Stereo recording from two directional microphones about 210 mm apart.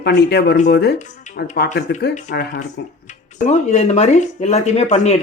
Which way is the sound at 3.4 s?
30° left (ahead or behind).